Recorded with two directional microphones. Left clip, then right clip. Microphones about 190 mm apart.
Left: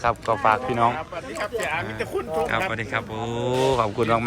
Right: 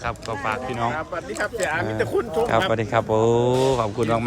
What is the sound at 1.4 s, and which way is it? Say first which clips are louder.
Speech: right 2 dB; 55° right (ahead or behind).